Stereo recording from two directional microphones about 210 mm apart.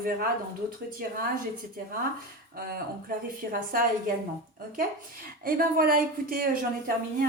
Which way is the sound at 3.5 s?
40° right (ahead or behind).